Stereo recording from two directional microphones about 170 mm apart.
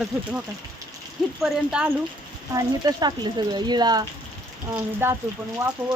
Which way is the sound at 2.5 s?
25° right (ahead or behind).